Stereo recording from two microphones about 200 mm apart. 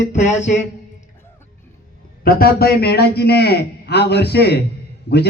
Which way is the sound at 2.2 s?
50° left (ahead or behind).